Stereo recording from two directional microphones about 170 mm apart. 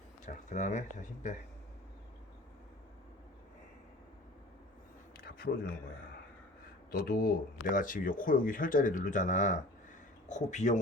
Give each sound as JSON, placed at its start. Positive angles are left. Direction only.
{"t": 0.5, "sound": "speech", "side_deg": 45}
{"t": 5.1, "sound": "a sound", "side_deg": 65}
{"t": 6.9, "sound": "speech", "side_deg": 60}